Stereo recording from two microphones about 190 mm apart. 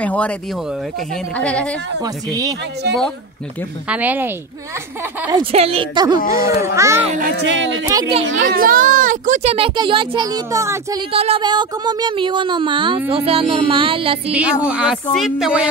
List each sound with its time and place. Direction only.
0.0 s speech: 5° left (ahead or behind)
1.3 s speech: 5° left (ahead or behind)
2.0 s speech: 20° right (ahead or behind)
3.9 s speech: 10° right (ahead or behind)
5.3 s speech: 30° right (ahead or behind)
7.1 s a child's voice: 45° right (ahead or behind)
7.4 s speech: 75° right (ahead or behind)
7.9 s speech: 20° right (ahead or behind)
8.4 s speech: 50° right (ahead or behind); by 11.0 s 15° right (ahead or behind)
11.1 s speech: 30° right (ahead or behind)
14.3 s speech: 5° right (ahead or behind)